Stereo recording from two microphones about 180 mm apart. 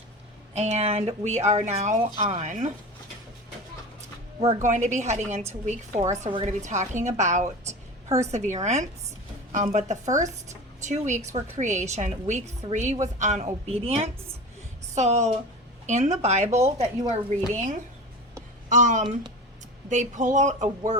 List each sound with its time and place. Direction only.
0.5 s a woman's voice: 35° right (ahead or behind)
2.0 s a woman's voice: 30° right (ahead or behind)
4.4 s a woman's voice: 40° right (ahead or behind)
7.7 s a sound: 15° right (ahead or behind)
8.3 s a woman's voice: 40° right (ahead or behind)